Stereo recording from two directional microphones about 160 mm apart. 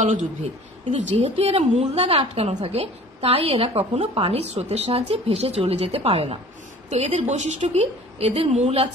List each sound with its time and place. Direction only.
0.0 s a woman's voice: 50° right (ahead or behind)